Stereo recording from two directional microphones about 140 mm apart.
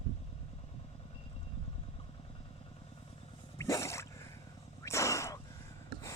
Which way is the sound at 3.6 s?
25° left (ahead or behind).